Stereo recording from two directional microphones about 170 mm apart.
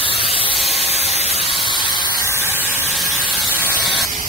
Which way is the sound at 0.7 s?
35° left (ahead or behind).